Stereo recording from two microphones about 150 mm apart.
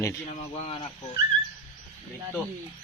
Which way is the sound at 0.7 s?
35° left (ahead or behind).